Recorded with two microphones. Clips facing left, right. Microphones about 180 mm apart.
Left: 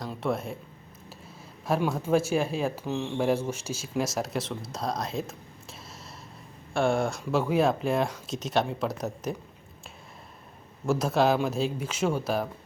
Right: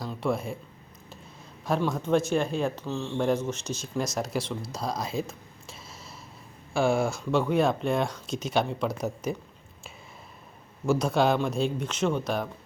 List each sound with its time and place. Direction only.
0.1 s speech: centre (ahead or behind)
1.6 s speech: 5° left (ahead or behind)
6.7 s speech: centre (ahead or behind)
10.8 s speech: centre (ahead or behind)